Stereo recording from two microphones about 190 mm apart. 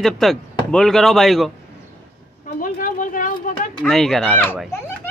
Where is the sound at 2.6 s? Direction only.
45° left (ahead or behind).